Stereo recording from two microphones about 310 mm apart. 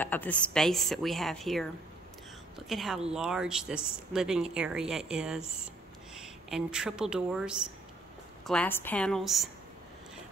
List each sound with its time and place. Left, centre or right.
0.0 s speech: centre
2.7 s a woman's voice: centre